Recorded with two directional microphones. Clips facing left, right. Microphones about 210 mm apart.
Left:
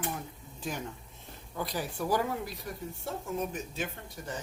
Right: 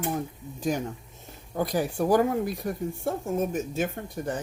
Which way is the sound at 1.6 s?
50° right (ahead or behind).